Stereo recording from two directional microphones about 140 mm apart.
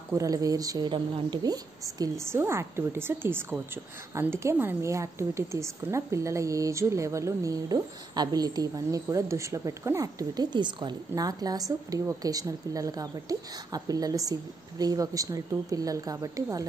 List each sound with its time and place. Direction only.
0.1 s a woman's voice: 25° right (ahead or behind)